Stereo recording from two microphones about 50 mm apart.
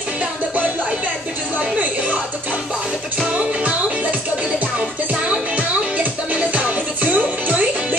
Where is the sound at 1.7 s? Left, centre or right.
Right.